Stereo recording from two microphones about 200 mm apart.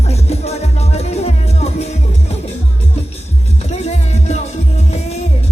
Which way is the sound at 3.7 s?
35° left (ahead or behind).